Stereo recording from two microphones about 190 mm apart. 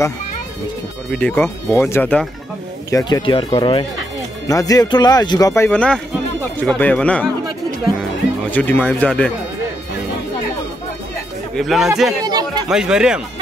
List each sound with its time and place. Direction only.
1.1 s speech: 5° left (ahead or behind)
2.9 s speech: 20° left (ahead or behind)
11.5 s speech: centre (ahead or behind)
12.3 s a sound: 20° right (ahead or behind)
12.6 s speech: 5° right (ahead or behind)